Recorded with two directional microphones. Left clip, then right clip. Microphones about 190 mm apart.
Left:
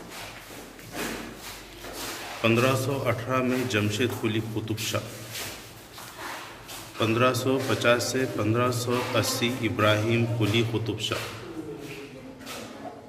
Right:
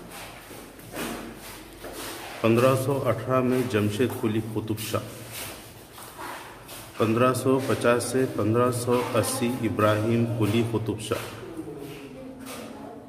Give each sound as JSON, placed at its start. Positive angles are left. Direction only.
{"t": 2.4, "sound": "a man's voice", "side_deg": -25}
{"t": 7.0, "sound": "a man's voice", "side_deg": -30}